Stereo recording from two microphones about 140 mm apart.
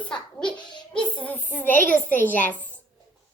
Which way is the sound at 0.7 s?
35° left (ahead or behind).